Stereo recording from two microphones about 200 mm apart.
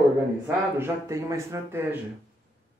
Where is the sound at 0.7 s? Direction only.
10° right (ahead or behind).